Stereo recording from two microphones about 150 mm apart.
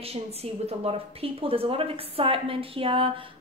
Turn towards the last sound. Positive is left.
turn(degrees=-40)  # may be behind; listen again after turning